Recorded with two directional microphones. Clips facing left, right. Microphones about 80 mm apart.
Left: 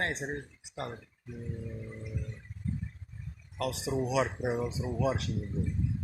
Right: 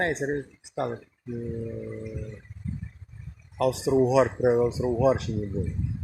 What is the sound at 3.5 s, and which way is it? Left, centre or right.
Speech, right.